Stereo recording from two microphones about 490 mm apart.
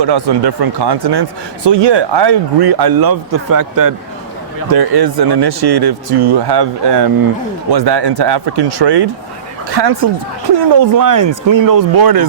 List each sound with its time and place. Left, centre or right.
0.0 s speech: right